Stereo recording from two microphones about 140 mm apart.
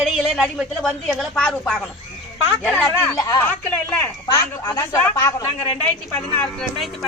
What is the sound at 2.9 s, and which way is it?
A woman's voice, 25° left (ahead or behind).